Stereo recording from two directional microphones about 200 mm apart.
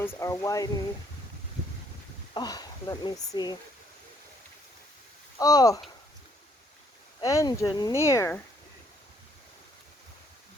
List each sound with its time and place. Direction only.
0.0 s speech: 15° left (ahead or behind)
2.3 s speech: 20° left (ahead or behind)
5.4 s speech: 20° left (ahead or behind)
7.2 s speech: 20° left (ahead or behind)